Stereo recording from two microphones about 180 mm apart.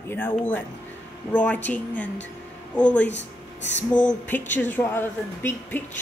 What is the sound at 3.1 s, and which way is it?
Speech, 80° left.